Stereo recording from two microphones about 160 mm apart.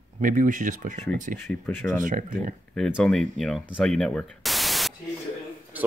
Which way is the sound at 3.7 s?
5° left (ahead or behind).